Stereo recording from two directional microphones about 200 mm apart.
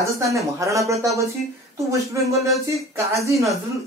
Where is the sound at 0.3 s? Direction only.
15° right (ahead or behind).